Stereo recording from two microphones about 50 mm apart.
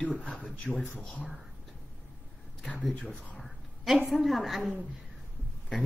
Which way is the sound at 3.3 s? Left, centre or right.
Centre.